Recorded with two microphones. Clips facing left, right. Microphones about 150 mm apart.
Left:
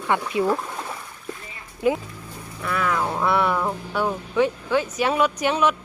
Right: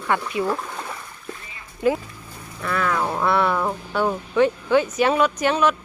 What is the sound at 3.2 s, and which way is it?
Speech, 10° left (ahead or behind).